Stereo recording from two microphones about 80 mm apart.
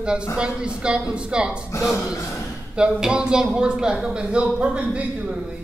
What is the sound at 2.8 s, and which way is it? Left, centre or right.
A man's voice, centre.